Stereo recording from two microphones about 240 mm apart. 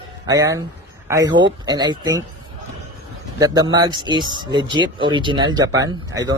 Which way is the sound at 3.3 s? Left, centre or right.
Centre.